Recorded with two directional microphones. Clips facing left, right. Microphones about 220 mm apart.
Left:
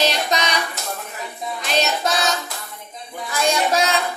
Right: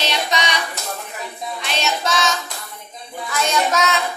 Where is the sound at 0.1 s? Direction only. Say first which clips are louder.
Even; 40° left (ahead or behind).